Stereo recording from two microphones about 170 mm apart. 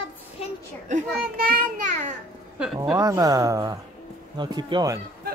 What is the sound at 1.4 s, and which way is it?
Child singing, 60° right (ahead or behind).